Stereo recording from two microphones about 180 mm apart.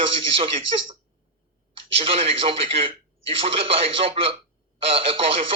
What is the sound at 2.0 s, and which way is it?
Speech, 35° right (ahead or behind).